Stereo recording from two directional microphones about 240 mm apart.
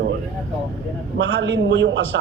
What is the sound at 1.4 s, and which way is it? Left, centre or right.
Speech, right.